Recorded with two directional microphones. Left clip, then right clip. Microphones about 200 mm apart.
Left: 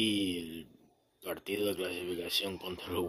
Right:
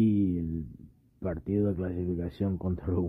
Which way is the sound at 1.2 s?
5° right (ahead or behind).